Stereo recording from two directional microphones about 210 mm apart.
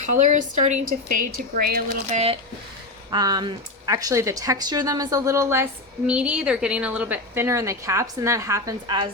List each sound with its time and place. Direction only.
0.1 s a woman's voice: 35° right (ahead or behind)
3.1 s a woman's voice: 20° right (ahead or behind)